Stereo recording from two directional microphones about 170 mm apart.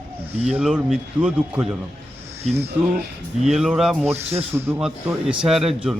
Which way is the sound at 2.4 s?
40° right (ahead or behind).